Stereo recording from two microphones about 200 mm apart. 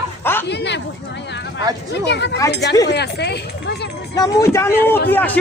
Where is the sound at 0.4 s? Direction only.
60° left (ahead or behind).